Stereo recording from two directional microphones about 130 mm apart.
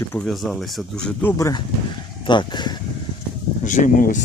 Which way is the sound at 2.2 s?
35° left (ahead or behind).